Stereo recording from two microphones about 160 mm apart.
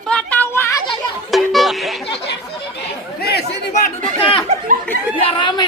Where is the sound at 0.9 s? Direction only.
Centre (ahead or behind).